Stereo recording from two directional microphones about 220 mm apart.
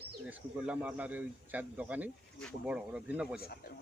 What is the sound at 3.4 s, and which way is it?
Speech, 45° left (ahead or behind).